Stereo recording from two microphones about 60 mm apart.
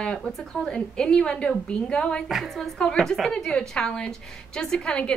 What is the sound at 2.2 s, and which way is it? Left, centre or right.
A woman's voice, centre.